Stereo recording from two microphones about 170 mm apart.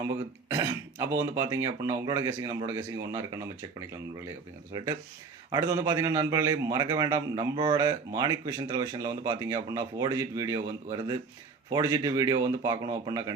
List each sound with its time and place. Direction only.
0.0 s speech: 15° right (ahead or behind)
5.5 s a man's voice: 20° right (ahead or behind)